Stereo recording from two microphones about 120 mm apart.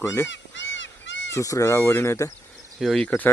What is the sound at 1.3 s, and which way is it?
Speech, 25° left (ahead or behind).